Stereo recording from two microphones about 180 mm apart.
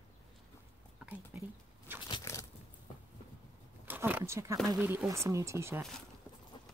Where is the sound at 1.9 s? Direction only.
10° right (ahead or behind).